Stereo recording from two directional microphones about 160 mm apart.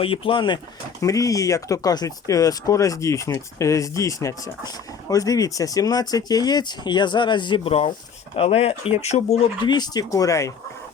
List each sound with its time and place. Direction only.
0.0 s speech: 35° left (ahead or behind)
9.6 s speech: 25° left (ahead or behind)